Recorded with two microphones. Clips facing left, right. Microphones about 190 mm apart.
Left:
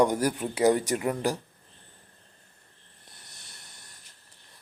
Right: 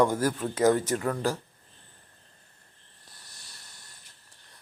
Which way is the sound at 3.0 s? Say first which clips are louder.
Left 1 dB; 20° left (ahead or behind).